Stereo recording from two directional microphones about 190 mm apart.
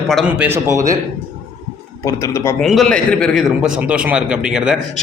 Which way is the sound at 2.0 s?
15° left (ahead or behind).